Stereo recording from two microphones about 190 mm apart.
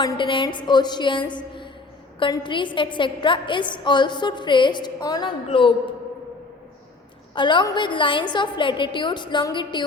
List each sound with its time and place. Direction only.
0.0 s a woman's voice: 25° left (ahead or behind)
1.3 s a sound: 25° left (ahead or behind)
2.1 s a woman's voice: 25° left (ahead or behind)
7.3 s a woman's voice: 25° left (ahead or behind)